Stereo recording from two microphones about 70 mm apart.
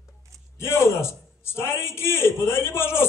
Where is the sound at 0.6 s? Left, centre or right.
Left.